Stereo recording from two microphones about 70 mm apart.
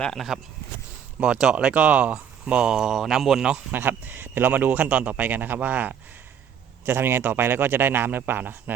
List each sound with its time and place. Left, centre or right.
1.2 s speech: centre
3.7 s a man's voice: right